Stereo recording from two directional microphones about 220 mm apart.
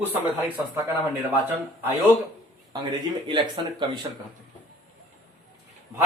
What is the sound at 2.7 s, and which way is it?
Speech, 20° right (ahead or behind).